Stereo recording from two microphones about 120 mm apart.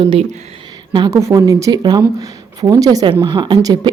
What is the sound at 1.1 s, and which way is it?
A woman's voice, 25° right (ahead or behind).